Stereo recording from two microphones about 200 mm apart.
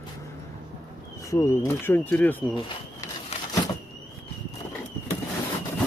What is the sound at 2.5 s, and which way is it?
Speech, 20° left (ahead or behind).